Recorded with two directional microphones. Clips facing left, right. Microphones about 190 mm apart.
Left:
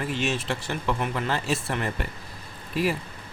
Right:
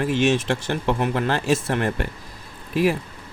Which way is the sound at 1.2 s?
45° right (ahead or behind).